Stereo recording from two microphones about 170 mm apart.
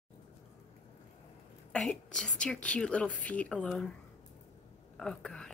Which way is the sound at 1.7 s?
5° left (ahead or behind).